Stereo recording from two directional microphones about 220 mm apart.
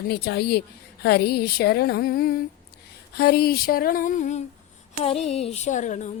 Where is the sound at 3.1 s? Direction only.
45° left (ahead or behind).